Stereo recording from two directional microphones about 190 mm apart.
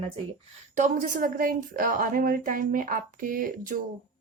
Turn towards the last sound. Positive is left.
turn(degrees=-50)  # may be behind; listen again after turning